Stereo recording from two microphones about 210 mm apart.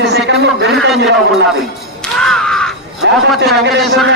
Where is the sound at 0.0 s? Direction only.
55° right (ahead or behind).